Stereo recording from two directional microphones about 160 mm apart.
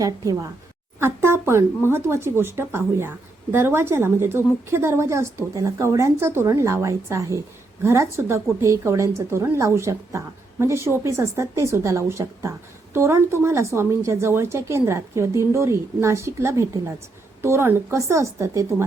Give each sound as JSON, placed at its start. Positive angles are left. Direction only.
{"t": 0.9, "sound": "a woman's voice", "side_deg": -15}